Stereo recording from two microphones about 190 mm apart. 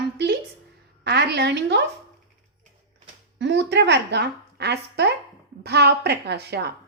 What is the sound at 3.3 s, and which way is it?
A woman's voice, 65° right (ahead or behind).